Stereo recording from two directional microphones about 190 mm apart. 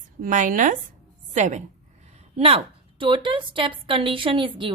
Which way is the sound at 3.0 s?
25° right (ahead or behind).